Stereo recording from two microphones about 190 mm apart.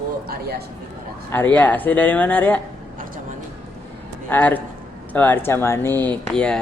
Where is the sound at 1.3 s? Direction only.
10° left (ahead or behind).